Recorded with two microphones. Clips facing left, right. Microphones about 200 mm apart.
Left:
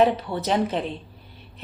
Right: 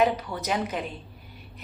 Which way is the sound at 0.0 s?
30° left (ahead or behind).